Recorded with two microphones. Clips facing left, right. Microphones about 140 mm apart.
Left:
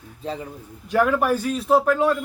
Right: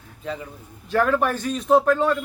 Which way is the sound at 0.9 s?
10° left (ahead or behind).